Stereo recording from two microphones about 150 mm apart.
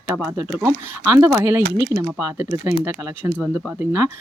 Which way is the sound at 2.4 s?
15° right (ahead or behind).